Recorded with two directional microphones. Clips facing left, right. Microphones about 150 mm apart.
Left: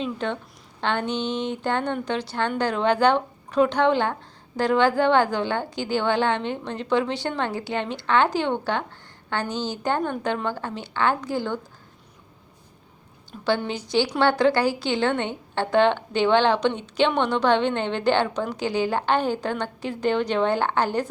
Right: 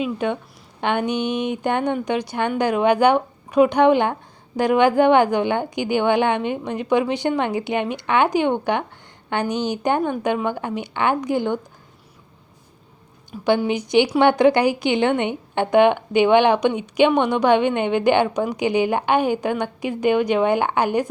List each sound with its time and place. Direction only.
0.0 s a woman's voice: 10° right (ahead or behind)
13.3 s a woman's voice: 5° right (ahead or behind)
13.7 s a woman's voice: 15° right (ahead or behind)